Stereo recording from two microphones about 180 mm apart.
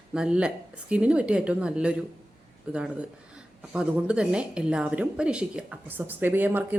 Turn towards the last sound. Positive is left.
turn(degrees=-10)  # may be behind; listen again after turning